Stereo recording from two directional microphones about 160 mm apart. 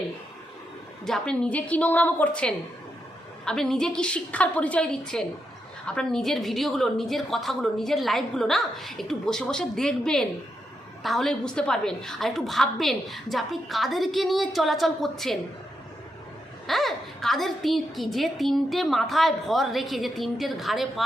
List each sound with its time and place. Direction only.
1.0 s a woman's voice: 5° left (ahead or behind)
16.6 s a woman's voice: centre (ahead or behind)